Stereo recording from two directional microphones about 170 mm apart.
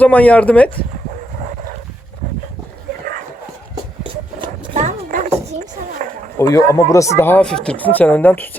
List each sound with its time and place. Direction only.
0.0 s a woman's voice: 10° left (ahead or behind)
4.0 s dog: 35° right (ahead or behind)
6.0 s a sound: 50° right (ahead or behind)
6.4 s a woman's voice: 20° left (ahead or behind)